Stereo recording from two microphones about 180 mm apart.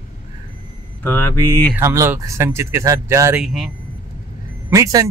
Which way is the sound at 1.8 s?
15° right (ahead or behind).